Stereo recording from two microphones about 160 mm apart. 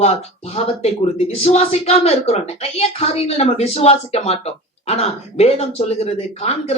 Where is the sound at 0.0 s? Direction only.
40° left (ahead or behind).